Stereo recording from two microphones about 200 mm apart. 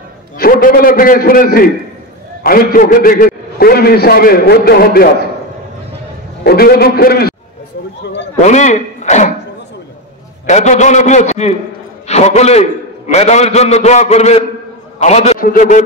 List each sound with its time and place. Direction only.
0.4 s a man's voice: 45° left (ahead or behind)
6.4 s a man's voice: 50° left (ahead or behind)
8.4 s a man's voice: 35° left (ahead or behind)
10.4 s a man's voice: 35° left (ahead or behind)